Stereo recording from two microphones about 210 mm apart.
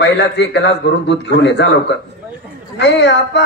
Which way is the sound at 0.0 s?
55° left (ahead or behind).